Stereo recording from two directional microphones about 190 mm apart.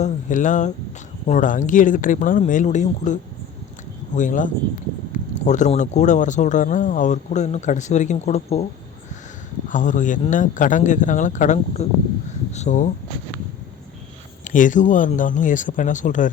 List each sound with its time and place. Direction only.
0.0 s speech: 40° left (ahead or behind)
9.6 s speech: 40° left (ahead or behind)
14.4 s speech: 45° left (ahead or behind)